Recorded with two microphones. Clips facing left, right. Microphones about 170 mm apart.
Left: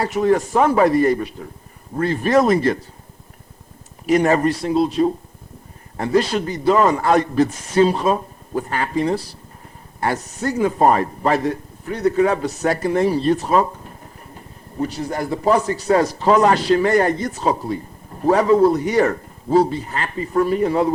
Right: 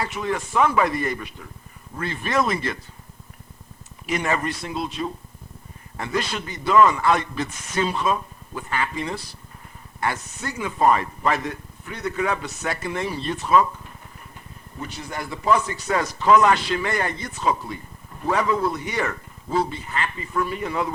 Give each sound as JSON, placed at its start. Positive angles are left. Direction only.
{"t": 0.0, "sound": "speech", "side_deg": 40}
{"t": 4.0, "sound": "speech", "side_deg": 40}